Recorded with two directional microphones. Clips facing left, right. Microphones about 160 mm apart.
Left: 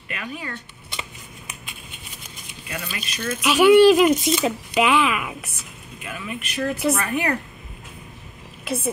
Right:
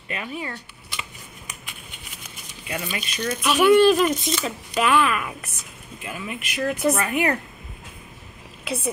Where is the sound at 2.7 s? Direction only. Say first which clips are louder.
Right 3 dB; 20° right (ahead or behind).